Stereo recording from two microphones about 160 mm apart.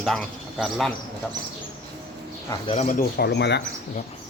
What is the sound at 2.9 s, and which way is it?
Speech, 80° left.